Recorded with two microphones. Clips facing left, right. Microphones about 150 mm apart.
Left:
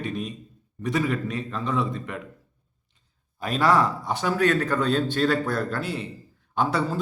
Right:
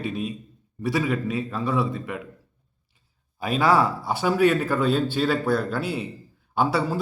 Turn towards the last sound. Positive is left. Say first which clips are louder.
# right 2 dB
turn(degrees=-10)  # may be behind; listen again after turning